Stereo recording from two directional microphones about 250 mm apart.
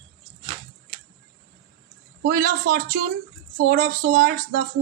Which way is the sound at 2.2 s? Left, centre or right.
Right.